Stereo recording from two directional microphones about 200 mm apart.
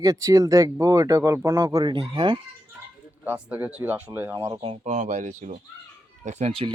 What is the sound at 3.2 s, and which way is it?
Speech, 10° right (ahead or behind).